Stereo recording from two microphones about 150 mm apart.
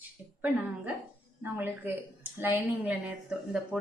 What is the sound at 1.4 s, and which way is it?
A woman's voice, 10° right (ahead or behind).